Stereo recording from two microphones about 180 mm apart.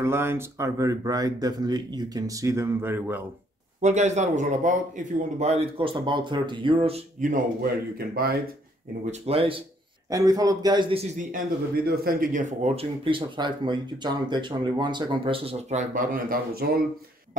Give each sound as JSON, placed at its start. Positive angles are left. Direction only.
{"t": 0.0, "sound": "speech", "side_deg": -15}
{"t": 3.8, "sound": "a man's voice", "side_deg": -40}
{"t": 8.1, "sound": "speech", "side_deg": -55}
{"t": 9.0, "sound": "a man's voice", "side_deg": -35}
{"t": 10.0, "sound": "speech", "side_deg": -20}
{"t": 11.1, "sound": "a man's voice", "side_deg": -50}